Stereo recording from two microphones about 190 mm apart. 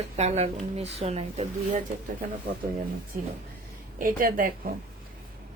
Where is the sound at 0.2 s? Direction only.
35° right (ahead or behind).